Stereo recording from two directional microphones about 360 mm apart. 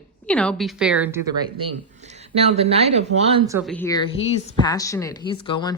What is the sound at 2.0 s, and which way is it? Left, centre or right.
A woman's voice, centre.